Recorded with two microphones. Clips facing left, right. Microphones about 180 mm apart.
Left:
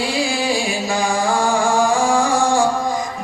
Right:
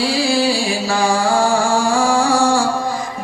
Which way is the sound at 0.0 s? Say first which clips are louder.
Right 4 dB; 15° left (ahead or behind).